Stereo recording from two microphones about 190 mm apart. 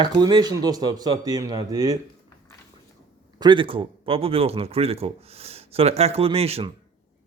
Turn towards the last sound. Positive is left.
turn(degrees=-30)  # may be behind; listen again after turning